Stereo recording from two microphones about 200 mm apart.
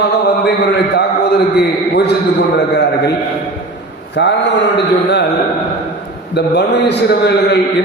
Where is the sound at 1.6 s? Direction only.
55° left (ahead or behind).